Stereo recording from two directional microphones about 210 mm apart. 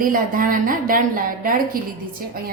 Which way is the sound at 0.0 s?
40° right (ahead or behind).